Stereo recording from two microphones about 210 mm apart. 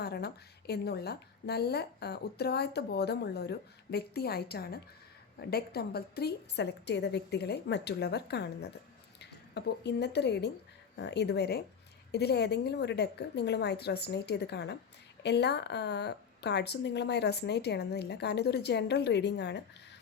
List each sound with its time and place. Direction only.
0.0 s a woman's voice: 50° left (ahead or behind)